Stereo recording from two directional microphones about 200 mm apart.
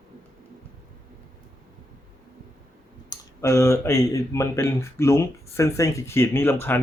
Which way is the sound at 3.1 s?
15° left (ahead or behind).